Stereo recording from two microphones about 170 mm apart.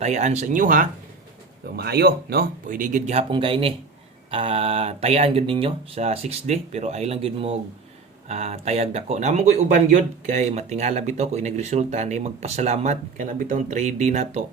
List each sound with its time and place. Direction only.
0.0 s speech: 40° right (ahead or behind)
1.7 s speech: 70° right (ahead or behind); by 3.2 s 45° right (ahead or behind)
3.3 s speech: 30° right (ahead or behind)